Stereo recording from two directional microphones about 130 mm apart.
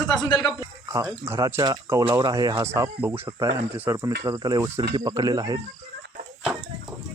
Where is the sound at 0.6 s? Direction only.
25° right (ahead or behind).